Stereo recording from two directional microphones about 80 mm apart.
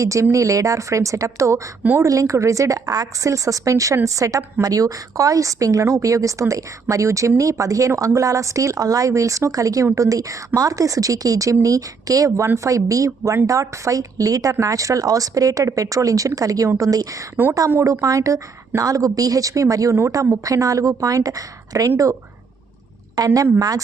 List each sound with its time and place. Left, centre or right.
0.0 s speech: right
23.1 s speech: right